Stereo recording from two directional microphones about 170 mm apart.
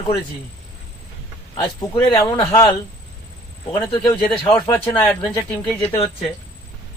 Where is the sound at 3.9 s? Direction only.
25° left (ahead or behind).